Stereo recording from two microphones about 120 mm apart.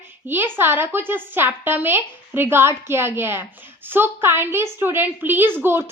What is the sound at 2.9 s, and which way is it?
Child singing, 20° right (ahead or behind).